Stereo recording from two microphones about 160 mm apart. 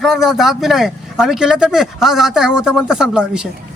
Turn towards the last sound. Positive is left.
turn(degrees=-5)  # may be behind; listen again after turning